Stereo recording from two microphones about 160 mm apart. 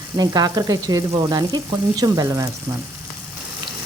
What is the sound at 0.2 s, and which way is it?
Speech, 25° right (ahead or behind).